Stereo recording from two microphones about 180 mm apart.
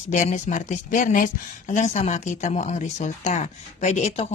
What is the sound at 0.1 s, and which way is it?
Speech, 40° left (ahead or behind).